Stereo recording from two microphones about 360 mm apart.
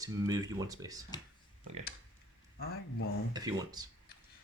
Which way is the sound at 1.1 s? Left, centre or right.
Centre.